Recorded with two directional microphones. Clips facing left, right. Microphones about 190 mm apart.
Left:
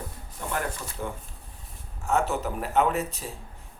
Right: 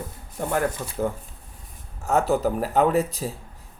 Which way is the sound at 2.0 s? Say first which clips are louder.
Right 5 dB; 35° right (ahead or behind).